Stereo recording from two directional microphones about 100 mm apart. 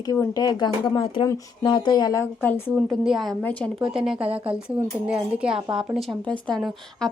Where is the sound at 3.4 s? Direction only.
15° left (ahead or behind).